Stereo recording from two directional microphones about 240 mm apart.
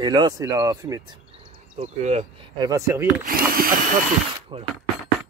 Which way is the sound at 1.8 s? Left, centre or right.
Right.